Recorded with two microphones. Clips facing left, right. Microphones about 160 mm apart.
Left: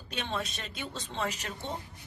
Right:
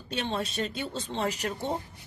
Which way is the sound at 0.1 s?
30° right (ahead or behind).